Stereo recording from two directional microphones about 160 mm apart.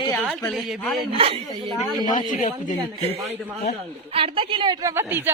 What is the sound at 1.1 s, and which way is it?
Speech, 35° right (ahead or behind).